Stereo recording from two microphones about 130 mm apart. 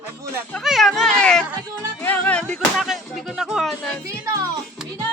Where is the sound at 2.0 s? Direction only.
10° left (ahead or behind).